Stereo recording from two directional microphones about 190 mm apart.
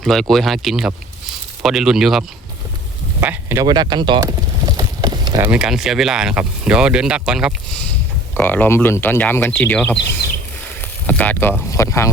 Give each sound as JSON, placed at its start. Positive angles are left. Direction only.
{"t": 0.0, "sound": "speech", "side_deg": 0}
{"t": 3.2, "sound": "a sound", "side_deg": -15}
{"t": 5.5, "sound": "speech", "side_deg": -5}
{"t": 8.4, "sound": "speech", "side_deg": 10}
{"t": 10.8, "sound": "a sound", "side_deg": 10}
{"t": 11.7, "sound": "speech", "side_deg": 15}